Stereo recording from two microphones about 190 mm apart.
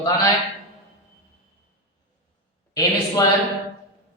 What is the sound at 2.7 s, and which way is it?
Speech, 20° left (ahead or behind).